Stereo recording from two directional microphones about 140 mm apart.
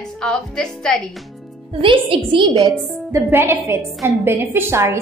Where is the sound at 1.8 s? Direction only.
40° right (ahead or behind).